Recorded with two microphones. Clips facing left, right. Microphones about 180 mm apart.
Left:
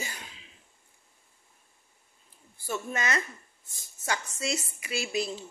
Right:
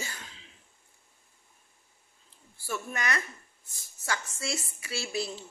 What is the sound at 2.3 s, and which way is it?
Speech, 20° left (ahead or behind).